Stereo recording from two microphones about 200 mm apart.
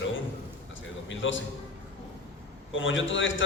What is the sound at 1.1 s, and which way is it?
Speech, 70° left (ahead or behind).